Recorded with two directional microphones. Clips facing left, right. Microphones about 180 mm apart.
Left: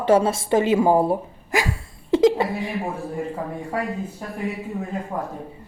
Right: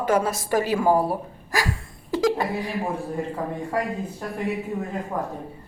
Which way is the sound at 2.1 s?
25° left (ahead or behind).